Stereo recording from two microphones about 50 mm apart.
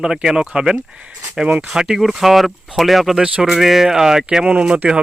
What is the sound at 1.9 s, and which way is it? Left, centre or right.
Speech, centre.